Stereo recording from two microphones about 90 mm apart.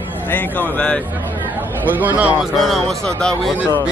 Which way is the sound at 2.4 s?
Centre (ahead or behind).